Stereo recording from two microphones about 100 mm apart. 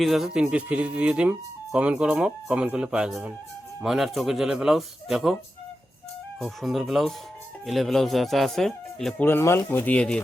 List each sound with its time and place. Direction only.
0.0 s speech: centre (ahead or behind)
6.4 s speech: centre (ahead or behind)
9.2 s speech: 25° left (ahead or behind)